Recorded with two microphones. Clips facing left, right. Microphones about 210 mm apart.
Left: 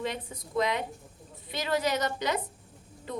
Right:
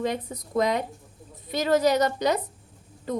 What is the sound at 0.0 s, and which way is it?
A woman's voice, 40° right (ahead or behind).